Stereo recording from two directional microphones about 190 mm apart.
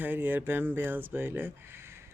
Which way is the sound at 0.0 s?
10° right (ahead or behind).